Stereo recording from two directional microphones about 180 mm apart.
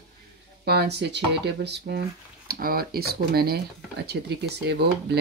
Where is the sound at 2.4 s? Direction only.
55° right (ahead or behind).